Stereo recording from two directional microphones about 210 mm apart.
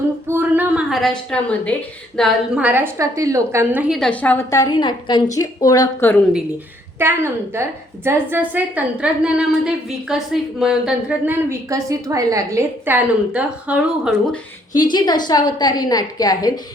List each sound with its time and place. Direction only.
0.3 s a sound: 10° right (ahead or behind)
2.1 s a woman's voice: centre (ahead or behind)
7.0 s a woman's voice: 10° right (ahead or behind)
14.9 s a woman's voice: 20° left (ahead or behind)